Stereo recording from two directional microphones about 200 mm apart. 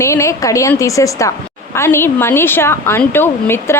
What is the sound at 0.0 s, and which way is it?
A woman's voice, 15° left (ahead or behind).